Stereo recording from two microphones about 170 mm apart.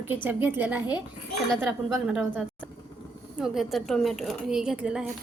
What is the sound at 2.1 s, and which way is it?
A woman's voice, 5° right (ahead or behind).